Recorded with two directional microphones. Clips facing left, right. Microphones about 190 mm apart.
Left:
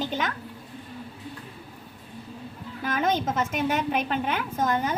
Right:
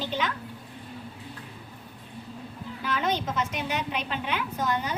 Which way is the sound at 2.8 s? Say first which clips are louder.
Left 3 dB; 50° left (ahead or behind).